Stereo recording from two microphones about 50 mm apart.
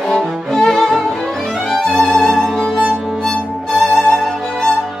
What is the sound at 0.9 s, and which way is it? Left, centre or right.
Violin, centre.